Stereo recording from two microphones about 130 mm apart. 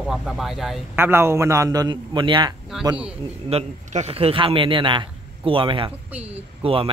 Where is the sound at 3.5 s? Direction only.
55° right (ahead or behind).